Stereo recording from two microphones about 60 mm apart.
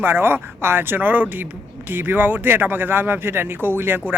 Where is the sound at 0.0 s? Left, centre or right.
Right.